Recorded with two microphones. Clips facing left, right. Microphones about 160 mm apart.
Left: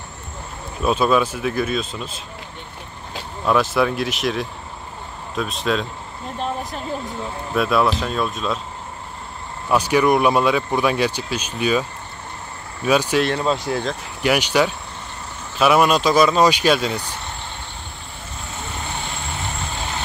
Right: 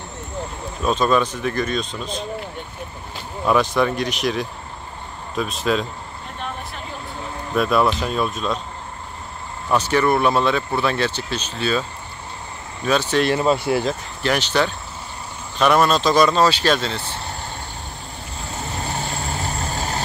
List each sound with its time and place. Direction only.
0.8 s speech: 5° left (ahead or behind)
3.4 s speech: centre (ahead or behind)
7.5 s speech: centre (ahead or behind)
9.7 s speech: 10° left (ahead or behind)
12.8 s speech: 10° left (ahead or behind)
13.2 s speech: 5° right (ahead or behind)
14.2 s speech: 10° left (ahead or behind)
18.5 s vehicle: 40° right (ahead or behind)